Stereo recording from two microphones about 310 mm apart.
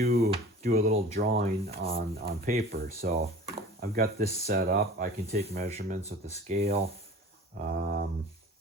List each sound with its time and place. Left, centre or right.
0.0 s speech: right